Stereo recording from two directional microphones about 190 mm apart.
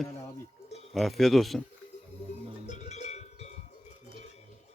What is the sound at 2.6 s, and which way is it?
Cowbell, 35° left (ahead or behind).